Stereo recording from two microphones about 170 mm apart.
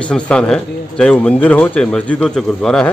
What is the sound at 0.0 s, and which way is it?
Speech, 5° left (ahead or behind).